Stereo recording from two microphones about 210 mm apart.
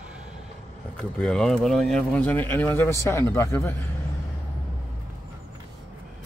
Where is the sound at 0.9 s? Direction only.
5° left (ahead or behind).